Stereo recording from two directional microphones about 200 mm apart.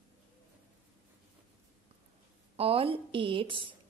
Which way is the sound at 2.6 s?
30° right (ahead or behind).